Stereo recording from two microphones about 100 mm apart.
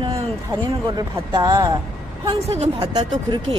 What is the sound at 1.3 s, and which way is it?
Speech, 45° right (ahead or behind).